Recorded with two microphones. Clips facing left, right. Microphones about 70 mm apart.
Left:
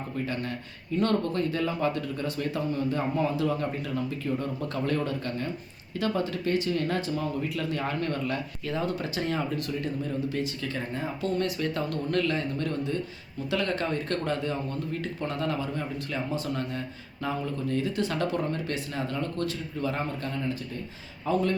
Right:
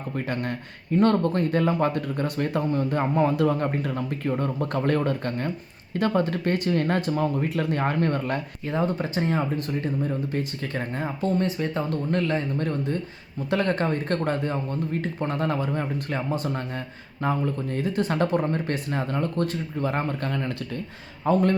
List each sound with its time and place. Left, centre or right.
0.9 s speech: right
11.3 s speech: right
21.3 s speech: right